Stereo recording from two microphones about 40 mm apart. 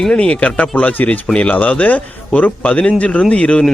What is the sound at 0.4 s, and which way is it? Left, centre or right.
Speech, left.